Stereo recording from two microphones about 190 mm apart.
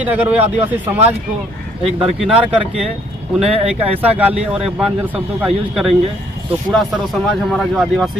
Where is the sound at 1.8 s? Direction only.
30° right (ahead or behind).